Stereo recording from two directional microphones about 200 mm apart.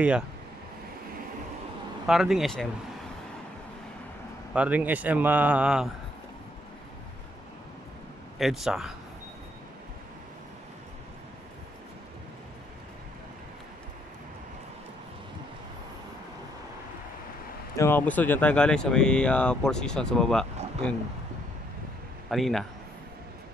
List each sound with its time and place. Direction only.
2.0 s speech: centre (ahead or behind)
4.6 s speech: 10° right (ahead or behind)
8.4 s speech: centre (ahead or behind)
17.7 s speech: 10° left (ahead or behind)
22.3 s speech: centre (ahead or behind)